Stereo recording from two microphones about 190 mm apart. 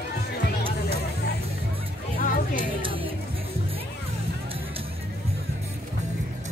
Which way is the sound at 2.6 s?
25° right (ahead or behind).